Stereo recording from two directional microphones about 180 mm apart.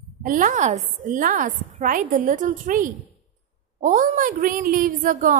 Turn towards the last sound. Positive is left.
turn(degrees=-50)  # may be behind; listen again after turning